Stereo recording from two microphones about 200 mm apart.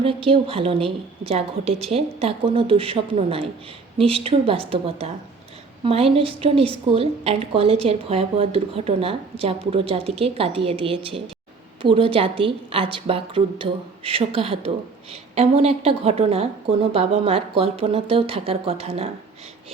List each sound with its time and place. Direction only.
0.0 s a woman's voice: 25° right (ahead or behind)